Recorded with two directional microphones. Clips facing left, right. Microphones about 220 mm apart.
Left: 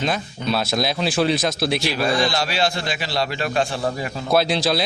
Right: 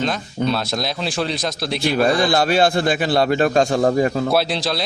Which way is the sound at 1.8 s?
55° right (ahead or behind).